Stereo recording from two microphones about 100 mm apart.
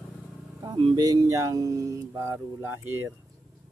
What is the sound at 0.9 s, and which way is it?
Speech, 40° right (ahead or behind).